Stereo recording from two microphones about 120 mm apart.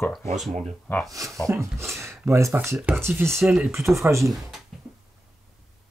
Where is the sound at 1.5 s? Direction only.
25° right (ahead or behind).